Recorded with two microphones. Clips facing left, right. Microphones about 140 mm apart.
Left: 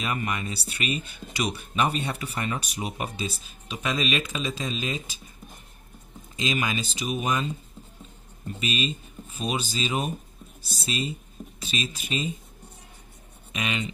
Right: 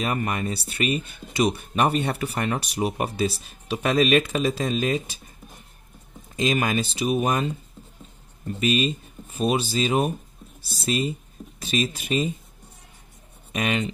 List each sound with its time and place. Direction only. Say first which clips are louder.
0.0 s speech: right 4 dB; 45° right (ahead or behind); by 3.7 s 70° right (ahead or behind)
3.7 s speech: right 8 dB; 55° right (ahead or behind)
6.3 s speech: right 5 dB; 50° right (ahead or behind)
8.5 s speech: right 7 dB; 50° right (ahead or behind)
13.5 s speech: right 5 dB; 45° right (ahead or behind)